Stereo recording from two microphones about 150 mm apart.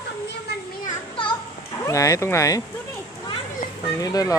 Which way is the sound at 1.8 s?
20° left (ahead or behind).